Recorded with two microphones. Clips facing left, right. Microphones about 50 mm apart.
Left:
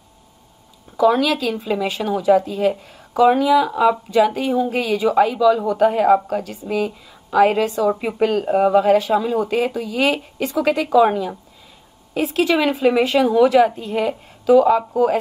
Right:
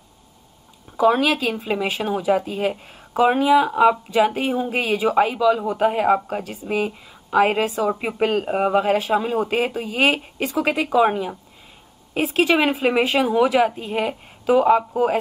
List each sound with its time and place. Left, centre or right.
0.9 s a woman's voice: right